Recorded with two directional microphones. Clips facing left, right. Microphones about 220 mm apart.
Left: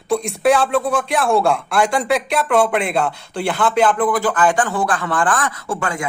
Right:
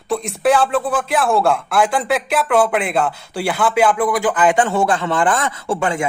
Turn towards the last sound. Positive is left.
turn(degrees=-25)  # may be behind; listen again after turning